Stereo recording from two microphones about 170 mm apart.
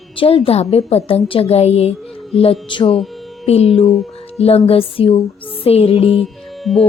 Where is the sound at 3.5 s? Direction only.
35° left (ahead or behind).